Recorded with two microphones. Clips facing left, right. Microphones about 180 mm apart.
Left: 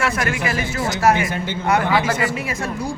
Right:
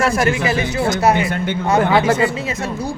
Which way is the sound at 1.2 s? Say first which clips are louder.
Right 4 dB; 60° right (ahead or behind).